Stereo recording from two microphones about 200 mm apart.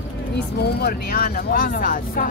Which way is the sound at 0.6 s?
50° left (ahead or behind).